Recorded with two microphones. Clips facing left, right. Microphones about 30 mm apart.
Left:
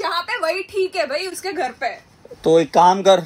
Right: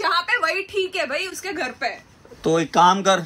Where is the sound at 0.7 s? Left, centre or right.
Right.